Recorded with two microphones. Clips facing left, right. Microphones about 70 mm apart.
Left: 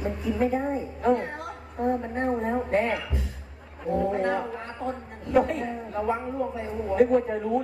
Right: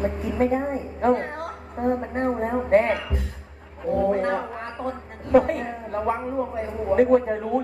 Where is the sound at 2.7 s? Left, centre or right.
Right.